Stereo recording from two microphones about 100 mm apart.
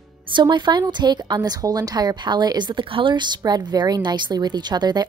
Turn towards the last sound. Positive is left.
turn(degrees=-45)  # may be behind; listen again after turning